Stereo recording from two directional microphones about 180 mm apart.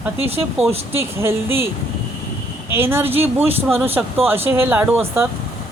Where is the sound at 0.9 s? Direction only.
15° right (ahead or behind).